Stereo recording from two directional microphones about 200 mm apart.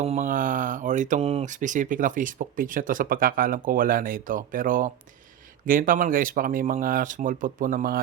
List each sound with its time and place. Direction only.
0.0 s speech: 35° right (ahead or behind)